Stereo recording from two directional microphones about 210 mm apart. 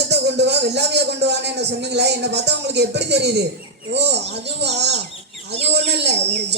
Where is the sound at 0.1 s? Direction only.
55° right (ahead or behind).